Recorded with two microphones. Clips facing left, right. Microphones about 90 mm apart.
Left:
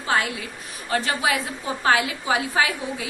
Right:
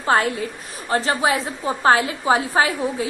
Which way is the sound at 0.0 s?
35° right (ahead or behind).